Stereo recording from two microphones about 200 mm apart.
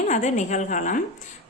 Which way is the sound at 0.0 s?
35° left (ahead or behind).